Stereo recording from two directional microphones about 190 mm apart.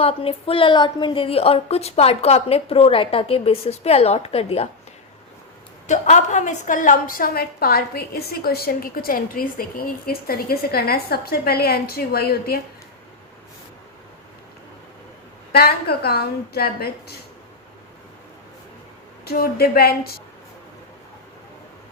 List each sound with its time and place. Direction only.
0.0 s a woman's voice: 30° left (ahead or behind)
5.9 s a woman's voice: 40° left (ahead or behind); by 12.5 s 55° left (ahead or behind)
15.5 s a woman's voice: 55° left (ahead or behind)
19.2 s a woman's voice: 55° left (ahead or behind)